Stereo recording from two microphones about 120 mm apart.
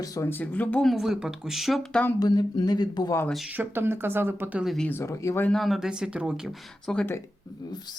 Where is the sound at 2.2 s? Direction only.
35° left (ahead or behind).